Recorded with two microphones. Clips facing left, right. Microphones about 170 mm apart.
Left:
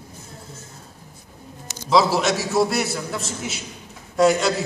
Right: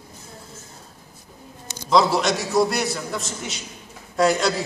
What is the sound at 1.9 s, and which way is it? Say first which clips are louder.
A man's voice: even; 5° left (ahead or behind).